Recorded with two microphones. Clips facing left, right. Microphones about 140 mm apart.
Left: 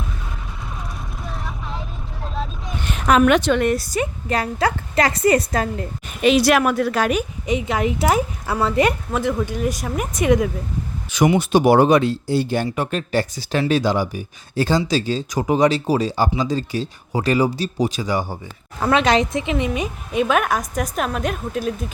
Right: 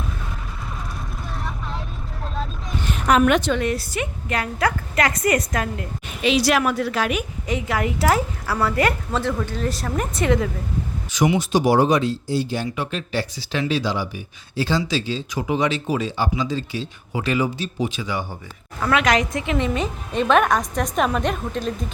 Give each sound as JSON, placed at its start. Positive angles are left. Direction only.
{"t": 1.2, "sound": "vehicle", "side_deg": 0}
{"t": 2.8, "sound": "a woman's voice", "side_deg": 90}
{"t": 6.2, "sound": "speech", "side_deg": 55}
{"t": 7.4, "sound": "a woman's voice", "side_deg": 20}
{"t": 11.1, "sound": "speech", "side_deg": 60}
{"t": 18.8, "sound": "a woman's voice", "side_deg": 30}